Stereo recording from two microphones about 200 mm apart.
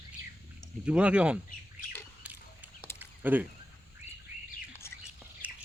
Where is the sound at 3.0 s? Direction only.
10° right (ahead or behind).